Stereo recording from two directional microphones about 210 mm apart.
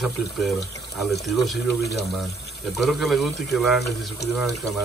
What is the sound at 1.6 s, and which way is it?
Speech, 50° left (ahead or behind).